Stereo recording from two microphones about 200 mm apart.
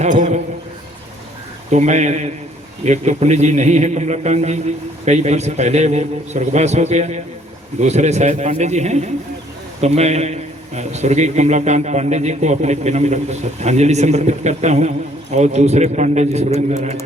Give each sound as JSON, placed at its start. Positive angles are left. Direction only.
{"t": 0.0, "sound": "a man's voice", "side_deg": -40}
{"t": 1.7, "sound": "a man's voice", "side_deg": -35}